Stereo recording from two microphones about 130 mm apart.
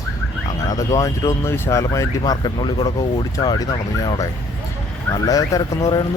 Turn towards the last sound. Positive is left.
turn(degrees=30)  # may be behind; listen again after turning